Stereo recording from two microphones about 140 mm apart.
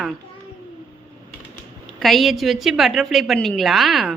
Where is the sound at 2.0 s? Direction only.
Centre (ahead or behind).